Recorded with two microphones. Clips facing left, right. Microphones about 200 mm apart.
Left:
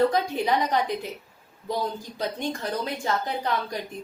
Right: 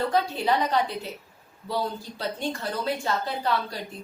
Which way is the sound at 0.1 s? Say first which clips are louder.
Even; 15° left (ahead or behind).